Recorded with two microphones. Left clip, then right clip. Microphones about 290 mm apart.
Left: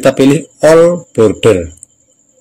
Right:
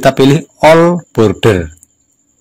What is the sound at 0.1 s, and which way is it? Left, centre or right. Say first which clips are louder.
Speech: even; right.